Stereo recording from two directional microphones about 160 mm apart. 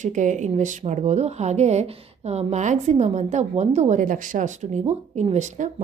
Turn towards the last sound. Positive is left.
turn(degrees=-45)  # may be behind; listen again after turning